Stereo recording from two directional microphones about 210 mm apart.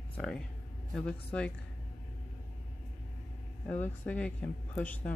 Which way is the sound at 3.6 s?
5° left (ahead or behind).